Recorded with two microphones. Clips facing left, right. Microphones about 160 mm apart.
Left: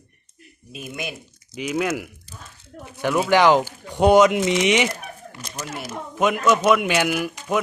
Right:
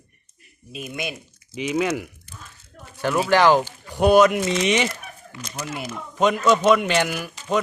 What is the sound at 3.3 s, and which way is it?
Speech, 15° left (ahead or behind).